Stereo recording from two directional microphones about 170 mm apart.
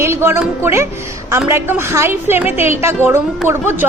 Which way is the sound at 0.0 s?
15° right (ahead or behind).